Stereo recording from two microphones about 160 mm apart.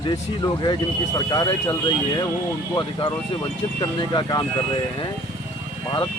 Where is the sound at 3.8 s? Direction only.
25° left (ahead or behind).